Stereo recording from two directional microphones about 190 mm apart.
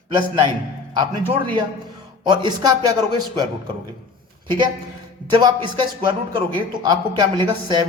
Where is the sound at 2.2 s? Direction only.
25° right (ahead or behind).